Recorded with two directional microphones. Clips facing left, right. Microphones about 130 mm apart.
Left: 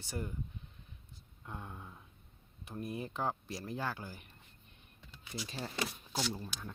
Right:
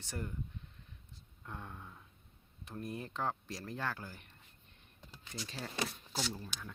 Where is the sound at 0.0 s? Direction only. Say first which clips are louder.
Left 2 dB; 10° left (ahead or behind).